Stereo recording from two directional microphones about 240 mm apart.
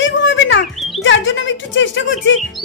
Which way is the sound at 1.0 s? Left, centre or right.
Left.